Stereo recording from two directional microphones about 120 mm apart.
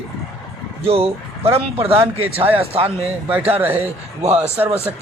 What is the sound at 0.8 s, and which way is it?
Speech, 55° right (ahead or behind).